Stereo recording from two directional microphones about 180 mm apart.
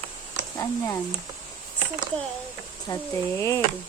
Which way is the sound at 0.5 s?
15° left (ahead or behind).